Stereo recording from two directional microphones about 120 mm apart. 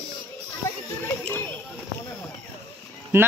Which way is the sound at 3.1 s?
20° right (ahead or behind).